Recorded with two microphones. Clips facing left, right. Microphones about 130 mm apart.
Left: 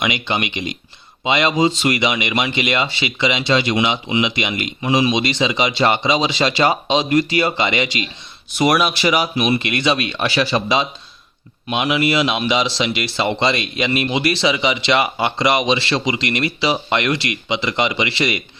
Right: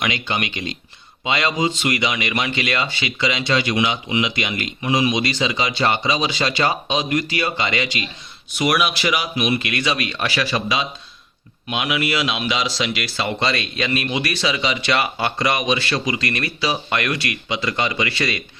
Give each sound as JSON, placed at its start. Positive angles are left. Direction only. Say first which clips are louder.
{"t": 0.0, "sound": "speech", "louder": "left 3 dB", "side_deg": 25}
{"t": 8.5, "sound": "speech", "louder": "left 3 dB", "side_deg": 35}